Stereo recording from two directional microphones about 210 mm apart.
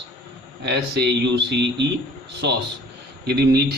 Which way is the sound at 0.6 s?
50° right (ahead or behind).